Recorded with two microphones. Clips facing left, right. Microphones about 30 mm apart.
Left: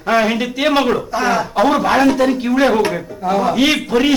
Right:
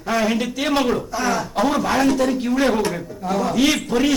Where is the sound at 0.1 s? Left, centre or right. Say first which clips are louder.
Left 5 dB; left.